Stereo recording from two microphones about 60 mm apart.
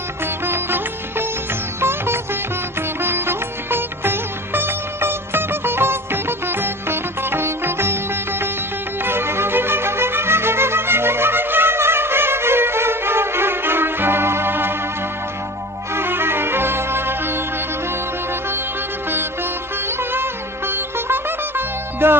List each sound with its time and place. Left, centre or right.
0.4 s music: right
1.8 s sitar: right
3.0 s music: right
15.9 s music: right
19.1 s music: right